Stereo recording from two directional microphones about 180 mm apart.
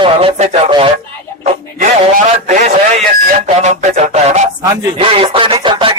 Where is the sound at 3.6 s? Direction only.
40° right (ahead or behind).